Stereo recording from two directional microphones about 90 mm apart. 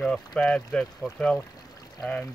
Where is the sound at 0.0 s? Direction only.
5° left (ahead or behind).